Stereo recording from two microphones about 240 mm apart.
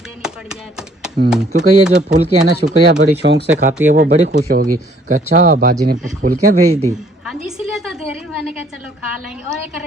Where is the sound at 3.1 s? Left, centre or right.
Right.